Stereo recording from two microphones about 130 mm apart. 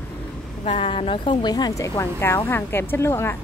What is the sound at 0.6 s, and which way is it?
A woman's voice, 45° left (ahead or behind).